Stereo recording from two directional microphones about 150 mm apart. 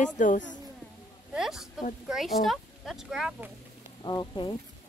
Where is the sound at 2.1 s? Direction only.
Centre (ahead or behind).